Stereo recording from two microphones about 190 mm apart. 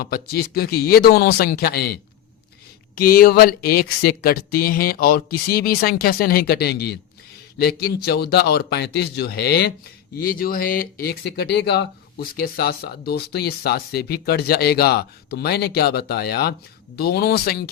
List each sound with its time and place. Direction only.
0.0 s speech: 55° left (ahead or behind)